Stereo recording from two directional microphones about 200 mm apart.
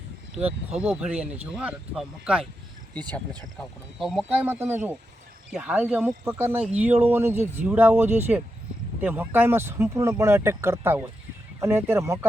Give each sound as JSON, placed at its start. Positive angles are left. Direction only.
{"t": 0.4, "sound": "speech", "side_deg": -5}
{"t": 3.6, "sound": "speech", "side_deg": 0}